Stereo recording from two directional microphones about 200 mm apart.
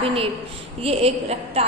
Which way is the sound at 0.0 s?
30° right (ahead or behind).